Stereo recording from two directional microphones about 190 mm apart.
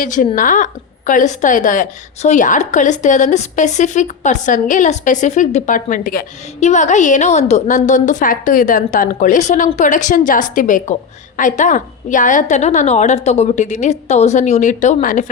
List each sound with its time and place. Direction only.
0.0 s a woman's voice: 45° left (ahead or behind)